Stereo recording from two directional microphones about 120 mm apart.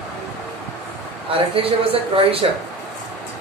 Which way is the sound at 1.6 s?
50° right (ahead or behind).